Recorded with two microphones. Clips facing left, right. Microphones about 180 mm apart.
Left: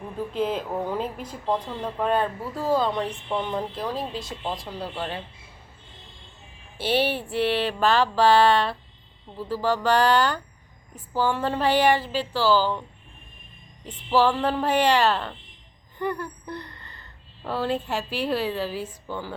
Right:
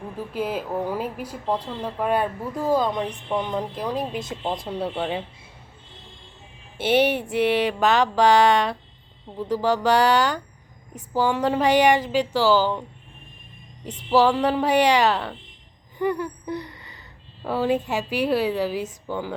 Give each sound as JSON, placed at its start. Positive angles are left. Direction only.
{"t": 0.3, "sound": "speech", "side_deg": -10}
{"t": 6.7, "sound": "speech", "side_deg": -20}
{"t": 14.1, "sound": "speech", "side_deg": -15}